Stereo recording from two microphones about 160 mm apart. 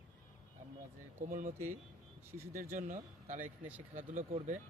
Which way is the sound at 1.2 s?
55° right (ahead or behind).